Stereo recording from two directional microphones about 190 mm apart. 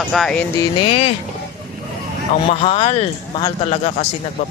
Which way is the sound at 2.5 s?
30° left (ahead or behind).